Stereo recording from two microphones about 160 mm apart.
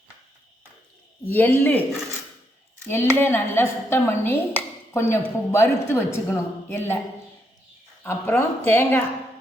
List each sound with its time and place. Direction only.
1.3 s speech: 10° left (ahead or behind)
2.9 s speech: 15° left (ahead or behind)
8.0 s speech: 15° left (ahead or behind)